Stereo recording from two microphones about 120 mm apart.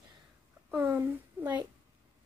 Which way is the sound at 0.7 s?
20° right (ahead or behind).